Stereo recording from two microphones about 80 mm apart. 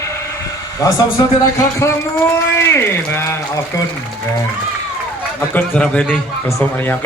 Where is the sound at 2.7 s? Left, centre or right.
Left.